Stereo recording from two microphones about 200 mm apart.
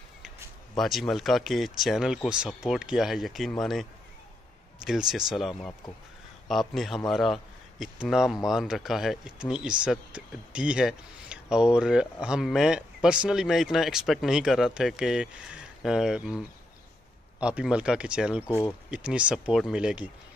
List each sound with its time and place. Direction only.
0.7 s speech: centre (ahead or behind)
4.8 s speech: centre (ahead or behind)
6.7 s speech: centre (ahead or behind)